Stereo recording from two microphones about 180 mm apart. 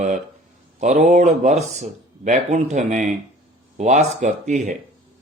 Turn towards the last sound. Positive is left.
turn(degrees=-40)  # may be behind; listen again after turning